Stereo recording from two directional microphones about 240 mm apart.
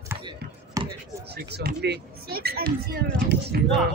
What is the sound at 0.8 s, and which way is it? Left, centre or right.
Basketball bounce, centre.